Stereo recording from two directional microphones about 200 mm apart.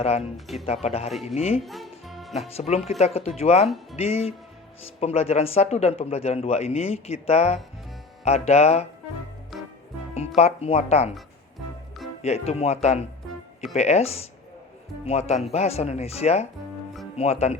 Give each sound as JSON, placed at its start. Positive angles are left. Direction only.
{"t": 0.0, "sound": "speech", "side_deg": 30}
{"t": 0.3, "sound": "speech", "side_deg": 0}
{"t": 0.6, "sound": "speech", "side_deg": 30}
{"t": 1.6, "sound": "music", "side_deg": 0}
{"t": 2.6, "sound": "speech", "side_deg": 30}
{"t": 9.5, "sound": "music", "side_deg": 0}
{"t": 10.2, "sound": "speech", "side_deg": 30}
{"t": 12.2, "sound": "speech", "side_deg": 30}